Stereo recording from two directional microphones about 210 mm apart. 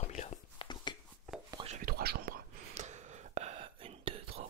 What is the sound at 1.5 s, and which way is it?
Whispering, 30° right (ahead or behind).